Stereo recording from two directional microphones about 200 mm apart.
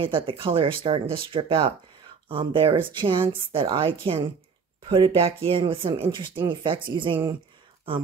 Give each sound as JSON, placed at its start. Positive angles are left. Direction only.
{"t": 0.0, "sound": "speech", "side_deg": -25}